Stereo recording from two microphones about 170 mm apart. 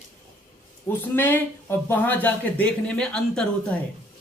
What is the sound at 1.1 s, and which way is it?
Speech, 15° left (ahead or behind).